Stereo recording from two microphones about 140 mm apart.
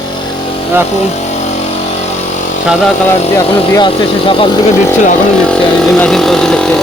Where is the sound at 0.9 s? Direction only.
55° left (ahead or behind).